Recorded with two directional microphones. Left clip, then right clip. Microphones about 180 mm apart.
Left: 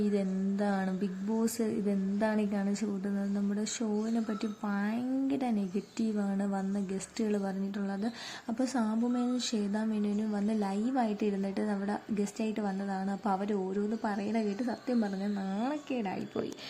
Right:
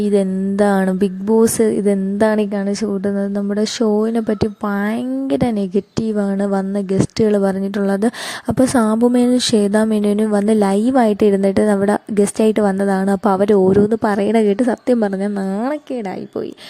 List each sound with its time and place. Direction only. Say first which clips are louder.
0.0 s a woman's voice: right 16 dB; 60° right (ahead or behind)